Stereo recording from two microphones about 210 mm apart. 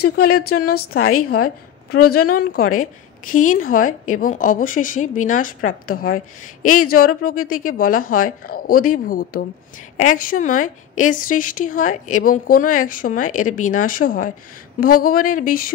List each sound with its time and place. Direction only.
0.0 s speech: 90° left
0.6 s speech: 45° left (ahead or behind)
1.4 s a woman's voice: 90° left
2.2 s a woman's voice: 45° left (ahead or behind)